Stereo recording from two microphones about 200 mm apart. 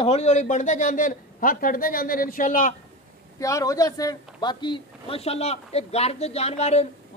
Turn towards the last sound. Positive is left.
turn(degrees=30)  # may be behind; listen again after turning